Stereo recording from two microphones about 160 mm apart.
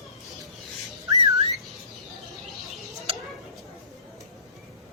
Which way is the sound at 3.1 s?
35° right (ahead or behind).